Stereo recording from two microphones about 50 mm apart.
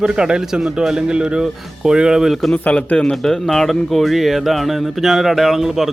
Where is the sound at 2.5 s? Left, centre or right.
Left.